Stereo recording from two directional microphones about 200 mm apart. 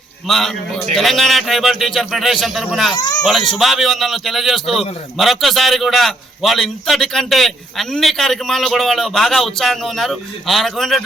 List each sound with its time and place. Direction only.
0.3 s a man's voice: centre (ahead or behind)
2.9 s speech: 20° left (ahead or behind)
3.2 s a man's voice: centre (ahead or behind)